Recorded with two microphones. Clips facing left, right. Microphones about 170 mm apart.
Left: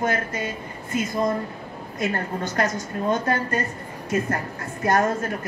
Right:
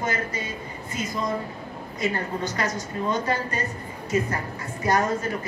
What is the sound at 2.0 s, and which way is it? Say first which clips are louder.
A woman's voice: left 1 dB; 50° left (ahead or behind).